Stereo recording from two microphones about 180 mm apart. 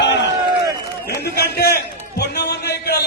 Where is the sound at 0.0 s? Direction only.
80° left.